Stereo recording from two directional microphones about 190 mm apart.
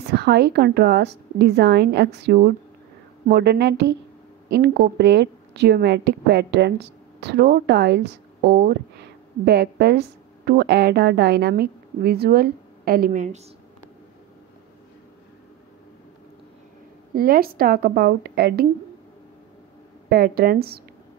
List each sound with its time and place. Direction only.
0.1 s a woman's voice: 60° right (ahead or behind); by 13.4 s 45° right (ahead or behind)
17.1 s speech: 50° right (ahead or behind)
20.1 s speech: 50° right (ahead or behind)